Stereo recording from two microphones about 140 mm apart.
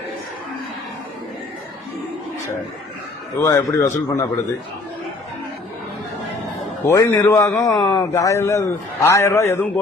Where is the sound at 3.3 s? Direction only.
25° left (ahead or behind).